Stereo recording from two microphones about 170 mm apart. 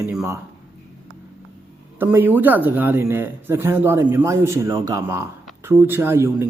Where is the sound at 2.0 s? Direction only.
10° right (ahead or behind).